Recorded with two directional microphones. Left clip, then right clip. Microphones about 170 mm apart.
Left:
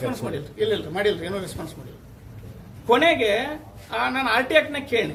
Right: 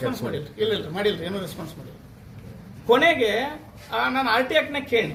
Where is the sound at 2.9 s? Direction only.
10° left (ahead or behind).